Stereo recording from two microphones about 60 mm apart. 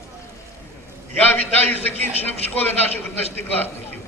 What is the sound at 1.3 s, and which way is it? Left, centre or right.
Speech, left.